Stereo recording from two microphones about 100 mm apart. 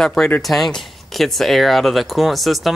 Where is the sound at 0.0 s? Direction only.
5° left (ahead or behind).